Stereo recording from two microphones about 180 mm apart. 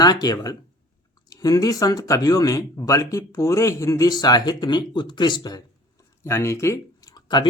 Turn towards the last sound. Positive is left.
turn(degrees=25)  # may be behind; listen again after turning